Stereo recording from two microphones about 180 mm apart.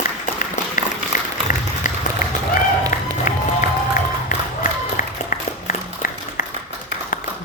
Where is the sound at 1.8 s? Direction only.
45° left (ahead or behind).